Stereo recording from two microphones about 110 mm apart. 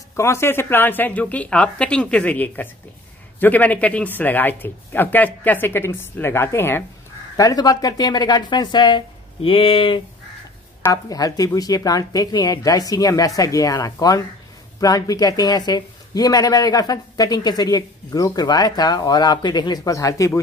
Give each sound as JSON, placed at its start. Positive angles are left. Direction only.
{"t": 0.1, "sound": "speech", "side_deg": 25}
{"t": 7.3, "sound": "speech", "side_deg": 35}
{"t": 10.9, "sound": "speech", "side_deg": 35}